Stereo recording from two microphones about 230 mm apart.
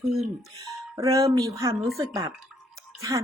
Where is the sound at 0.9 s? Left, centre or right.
Centre.